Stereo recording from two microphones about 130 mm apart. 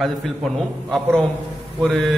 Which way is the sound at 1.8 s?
Centre (ahead or behind).